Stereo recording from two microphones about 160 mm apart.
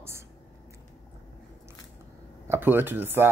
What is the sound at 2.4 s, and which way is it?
Speech, 15° right (ahead or behind).